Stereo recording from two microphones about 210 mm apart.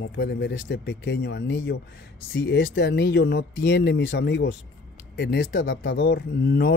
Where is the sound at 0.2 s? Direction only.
55° left (ahead or behind).